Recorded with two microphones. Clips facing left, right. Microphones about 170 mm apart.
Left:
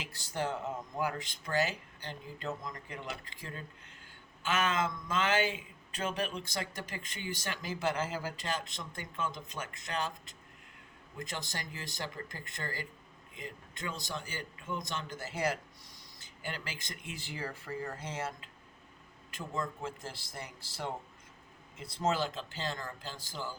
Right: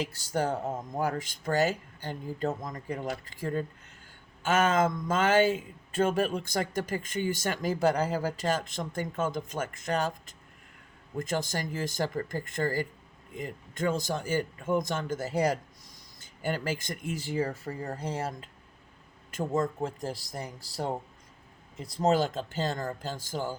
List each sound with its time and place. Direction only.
0.0 s speech: 40° right (ahead or behind)
11.2 s speech: 45° right (ahead or behind)